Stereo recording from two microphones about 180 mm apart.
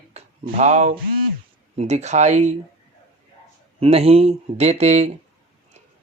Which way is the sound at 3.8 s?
35° right (ahead or behind).